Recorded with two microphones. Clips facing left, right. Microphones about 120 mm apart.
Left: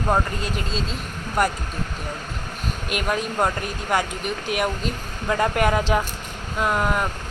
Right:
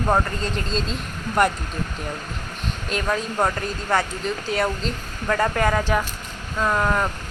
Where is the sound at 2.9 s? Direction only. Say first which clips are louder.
Even; 15° left (ahead or behind).